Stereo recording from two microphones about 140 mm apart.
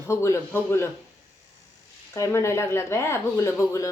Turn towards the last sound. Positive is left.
turn(degrees=20)  # may be behind; listen again after turning